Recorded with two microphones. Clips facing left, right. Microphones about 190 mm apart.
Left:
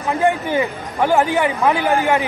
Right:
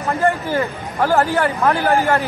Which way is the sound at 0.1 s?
15° left (ahead or behind).